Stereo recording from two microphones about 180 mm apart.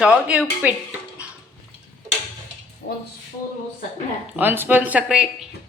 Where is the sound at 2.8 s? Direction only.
55° left (ahead or behind).